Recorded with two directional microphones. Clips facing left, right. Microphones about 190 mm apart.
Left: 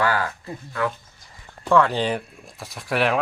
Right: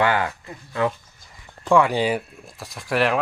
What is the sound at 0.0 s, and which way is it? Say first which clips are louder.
Speech: right 2 dB; 25° right (ahead or behind).